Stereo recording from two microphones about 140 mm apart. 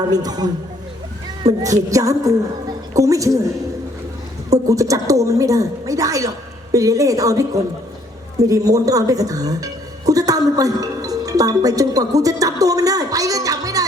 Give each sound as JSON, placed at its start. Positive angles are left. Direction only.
{"t": 0.1, "sound": "a woman's voice", "side_deg": -30}
{"t": 4.7, "sound": "a woman's voice", "side_deg": -25}
{"t": 10.1, "sound": "music", "side_deg": -25}